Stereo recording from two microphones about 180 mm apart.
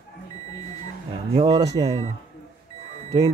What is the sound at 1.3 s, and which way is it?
Speech, 25° right (ahead or behind).